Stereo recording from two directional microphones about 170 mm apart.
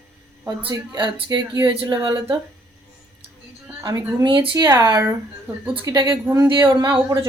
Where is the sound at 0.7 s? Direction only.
25° right (ahead or behind).